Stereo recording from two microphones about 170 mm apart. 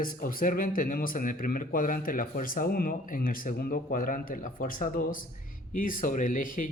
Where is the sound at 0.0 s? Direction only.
55° left (ahead or behind).